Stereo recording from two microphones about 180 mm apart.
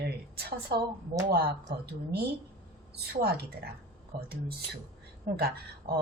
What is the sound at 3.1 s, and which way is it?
Speech, 60° right (ahead or behind).